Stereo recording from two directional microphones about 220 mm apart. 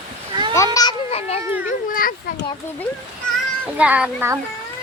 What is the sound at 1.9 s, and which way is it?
Speech, 40° left (ahead or behind).